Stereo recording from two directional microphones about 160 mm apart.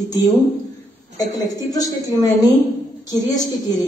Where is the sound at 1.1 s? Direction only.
20° left (ahead or behind).